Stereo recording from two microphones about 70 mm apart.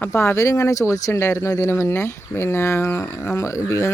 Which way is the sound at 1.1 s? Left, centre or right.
Left.